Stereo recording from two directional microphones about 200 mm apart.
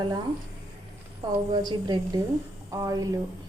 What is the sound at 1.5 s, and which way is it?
A woman's voice, 20° right (ahead or behind).